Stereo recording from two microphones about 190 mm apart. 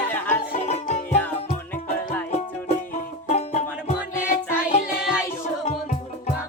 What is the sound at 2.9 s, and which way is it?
Music, 35° left (ahead or behind).